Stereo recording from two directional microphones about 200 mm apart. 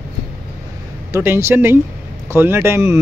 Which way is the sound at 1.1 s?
15° right (ahead or behind).